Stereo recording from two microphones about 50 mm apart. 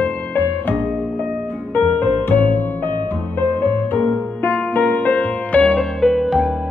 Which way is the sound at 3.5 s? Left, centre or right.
Left.